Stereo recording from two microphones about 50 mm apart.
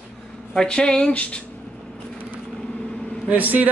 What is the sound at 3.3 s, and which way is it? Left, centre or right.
Speech, right.